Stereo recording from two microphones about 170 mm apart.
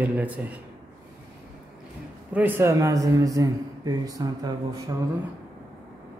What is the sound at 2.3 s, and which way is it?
A man's voice, 10° right (ahead or behind).